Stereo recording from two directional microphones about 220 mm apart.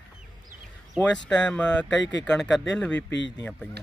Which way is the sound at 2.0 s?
55° left (ahead or behind).